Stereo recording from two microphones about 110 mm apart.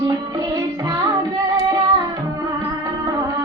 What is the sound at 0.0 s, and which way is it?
Music, 35° right (ahead or behind).